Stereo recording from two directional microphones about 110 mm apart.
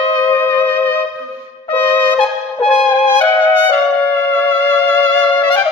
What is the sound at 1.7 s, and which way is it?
Music, 15° left (ahead or behind).